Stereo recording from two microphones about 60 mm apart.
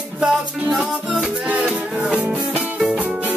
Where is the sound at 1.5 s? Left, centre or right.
Centre.